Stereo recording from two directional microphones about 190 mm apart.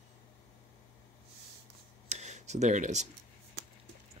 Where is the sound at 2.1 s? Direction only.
35° right (ahead or behind).